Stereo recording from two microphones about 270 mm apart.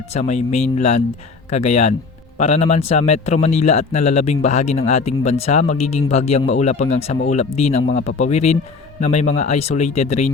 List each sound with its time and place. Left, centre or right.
0.1 s a man's voice: left